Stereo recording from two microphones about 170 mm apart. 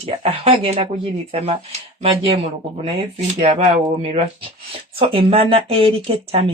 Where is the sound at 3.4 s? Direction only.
45° right (ahead or behind).